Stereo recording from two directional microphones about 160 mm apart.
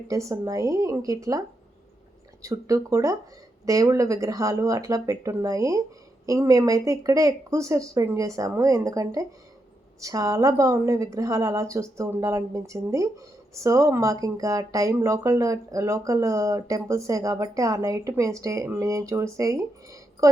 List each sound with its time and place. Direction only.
0.1 s speech: 20° right (ahead or behind)